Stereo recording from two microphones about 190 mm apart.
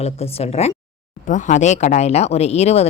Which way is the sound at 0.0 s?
30° left (ahead or behind).